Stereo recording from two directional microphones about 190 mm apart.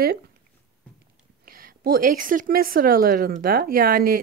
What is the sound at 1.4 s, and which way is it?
Speech, 50° right (ahead or behind).